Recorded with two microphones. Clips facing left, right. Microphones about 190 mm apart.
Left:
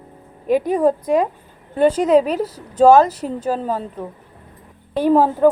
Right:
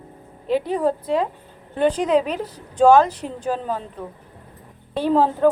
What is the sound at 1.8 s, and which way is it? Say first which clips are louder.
A woman's voice: left 4 dB; 40° left (ahead or behind).